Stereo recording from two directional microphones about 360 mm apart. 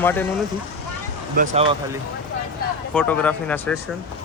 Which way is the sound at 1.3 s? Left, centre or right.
Right.